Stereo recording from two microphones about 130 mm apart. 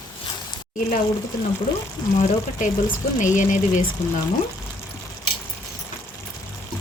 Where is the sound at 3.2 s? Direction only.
75° left (ahead or behind).